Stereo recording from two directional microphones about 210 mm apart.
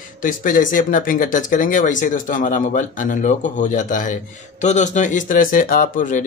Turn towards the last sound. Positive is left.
turn(degrees=40)  # may be behind; listen again after turning